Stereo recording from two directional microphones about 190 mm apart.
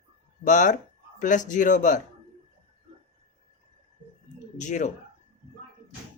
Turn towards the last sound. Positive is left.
turn(degrees=40)  # may be behind; listen again after turning